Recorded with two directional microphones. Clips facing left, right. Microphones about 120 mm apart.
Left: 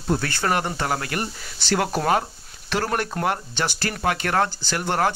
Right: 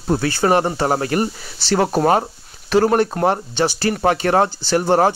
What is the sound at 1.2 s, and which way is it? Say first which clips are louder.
A man's voice: right 8 dB; 20° right (ahead or behind).